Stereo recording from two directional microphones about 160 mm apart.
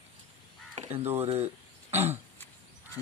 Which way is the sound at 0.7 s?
45° right (ahead or behind).